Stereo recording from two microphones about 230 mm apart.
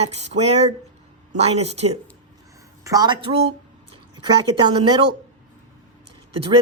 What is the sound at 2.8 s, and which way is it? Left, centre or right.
Speech, centre.